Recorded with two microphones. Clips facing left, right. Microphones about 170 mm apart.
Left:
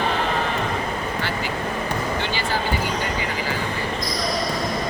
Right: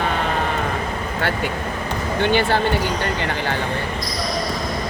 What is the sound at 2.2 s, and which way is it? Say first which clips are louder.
Speech: right 8 dB; 60° right (ahead or behind).